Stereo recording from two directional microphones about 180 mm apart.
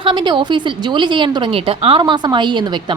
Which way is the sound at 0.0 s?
25° right (ahead or behind).